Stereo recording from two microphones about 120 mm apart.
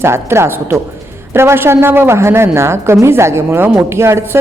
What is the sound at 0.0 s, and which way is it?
A woman's voice, 20° right (ahead or behind).